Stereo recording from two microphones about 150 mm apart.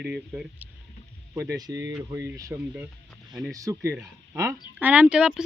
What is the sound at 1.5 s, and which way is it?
Speech, 25° right (ahead or behind).